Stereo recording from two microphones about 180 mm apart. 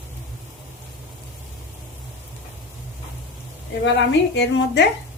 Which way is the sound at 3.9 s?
75° left (ahead or behind).